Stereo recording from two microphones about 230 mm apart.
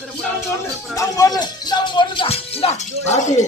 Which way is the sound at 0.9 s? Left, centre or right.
Centre.